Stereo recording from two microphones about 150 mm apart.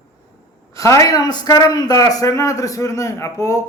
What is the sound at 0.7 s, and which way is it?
A man's voice, 20° left (ahead or behind).